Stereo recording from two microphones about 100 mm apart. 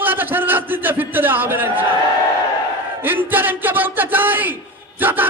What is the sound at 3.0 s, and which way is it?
A man's voice, 20° right (ahead or behind).